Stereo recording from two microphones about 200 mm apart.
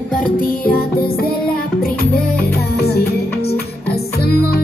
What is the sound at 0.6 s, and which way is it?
Music, 50° left (ahead or behind).